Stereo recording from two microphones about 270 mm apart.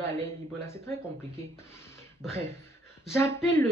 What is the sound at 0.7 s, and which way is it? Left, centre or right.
Speech, centre.